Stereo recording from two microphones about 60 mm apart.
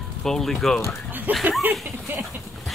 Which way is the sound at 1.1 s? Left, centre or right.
Right.